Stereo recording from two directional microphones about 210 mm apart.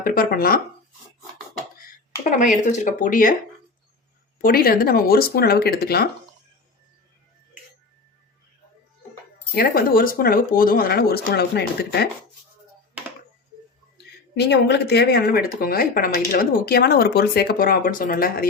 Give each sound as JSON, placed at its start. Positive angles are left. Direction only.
{"t": 0.0, "sound": "speech", "side_deg": 45}
{"t": 2.4, "sound": "speech", "side_deg": 35}
{"t": 4.4, "sound": "speech", "side_deg": 45}
{"t": 9.6, "sound": "speech", "side_deg": 45}
{"t": 14.3, "sound": "speech", "side_deg": 55}